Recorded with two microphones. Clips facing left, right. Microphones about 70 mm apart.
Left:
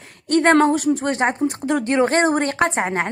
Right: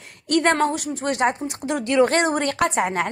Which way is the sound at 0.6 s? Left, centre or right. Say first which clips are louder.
Left 5 dB; left.